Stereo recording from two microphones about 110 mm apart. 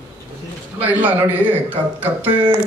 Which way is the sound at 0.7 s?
15° right (ahead or behind).